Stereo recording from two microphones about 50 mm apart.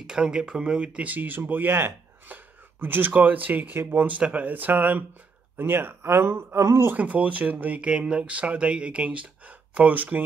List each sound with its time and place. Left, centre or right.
0.0 s speech: centre; by 2.0 s right
2.2 s a sound: right
3.2 s speech: right
7.0 s speech: right